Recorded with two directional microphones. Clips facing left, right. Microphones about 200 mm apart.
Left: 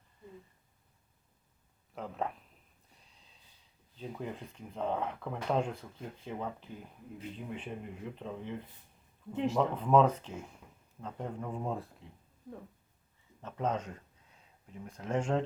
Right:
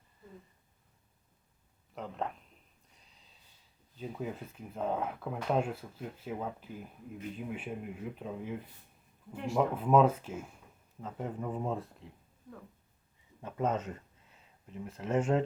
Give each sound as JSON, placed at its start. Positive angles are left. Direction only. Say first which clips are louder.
{"t": 2.0, "sound": "speech", "louder": "left 1 dB", "side_deg": 0}
{"t": 2.9, "sound": "a sound", "louder": "left 2 dB", "side_deg": 0}
{"t": 3.9, "sound": "speech", "louder": "right 2 dB", "side_deg": -5}
{"t": 9.3, "sound": "speech", "louder": "left 5 dB", "side_deg": 20}
{"t": 9.6, "sound": "speech", "louder": "right 1 dB", "side_deg": -5}
{"t": 13.4, "sound": "speech", "louder": "right 2 dB", "side_deg": -10}